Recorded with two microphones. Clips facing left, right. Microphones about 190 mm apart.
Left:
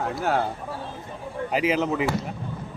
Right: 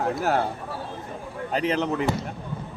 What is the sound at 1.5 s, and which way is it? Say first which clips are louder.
Speech: left 1 dB; 5° left (ahead or behind).